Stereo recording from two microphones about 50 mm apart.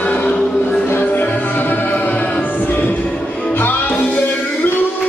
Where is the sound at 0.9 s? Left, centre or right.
Left.